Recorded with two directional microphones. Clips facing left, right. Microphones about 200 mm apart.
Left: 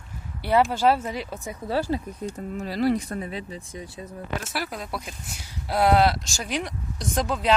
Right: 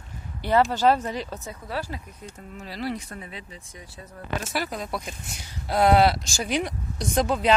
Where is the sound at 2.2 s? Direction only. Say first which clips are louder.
Left 9 dB; 40° left (ahead or behind).